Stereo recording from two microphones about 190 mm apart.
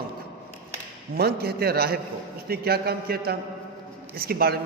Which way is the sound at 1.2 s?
55° right (ahead or behind).